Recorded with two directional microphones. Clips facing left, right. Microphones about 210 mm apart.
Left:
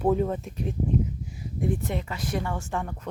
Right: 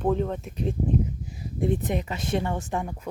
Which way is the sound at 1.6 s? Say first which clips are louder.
Right 3 dB; 20° right (ahead or behind).